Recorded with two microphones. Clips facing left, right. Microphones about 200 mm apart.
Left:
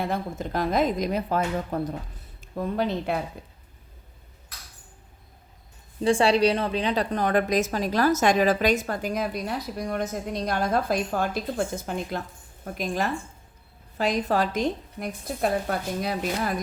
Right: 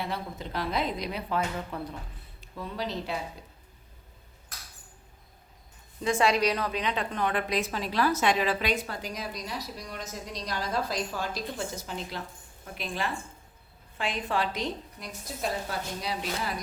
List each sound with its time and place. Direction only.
0.0 s a woman's voice: 45° left (ahead or behind)
6.0 s a woman's voice: 30° left (ahead or behind); by 16.6 s 50° left (ahead or behind)